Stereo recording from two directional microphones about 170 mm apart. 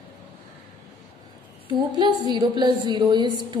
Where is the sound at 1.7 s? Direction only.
25° right (ahead or behind).